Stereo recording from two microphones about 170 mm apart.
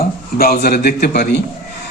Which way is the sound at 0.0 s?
60° left (ahead or behind).